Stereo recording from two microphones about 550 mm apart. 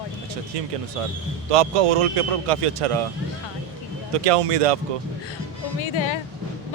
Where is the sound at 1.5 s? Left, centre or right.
Right.